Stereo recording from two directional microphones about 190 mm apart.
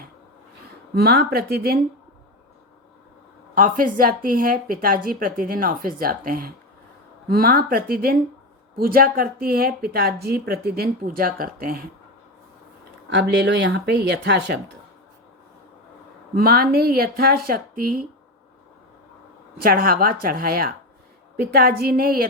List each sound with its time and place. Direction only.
0.9 s speech: 55° right (ahead or behind)
3.5 s speech: 45° right (ahead or behind)
13.1 s speech: 65° right (ahead or behind)
16.3 s speech: 50° right (ahead or behind)
19.6 s speech: 50° right (ahead or behind)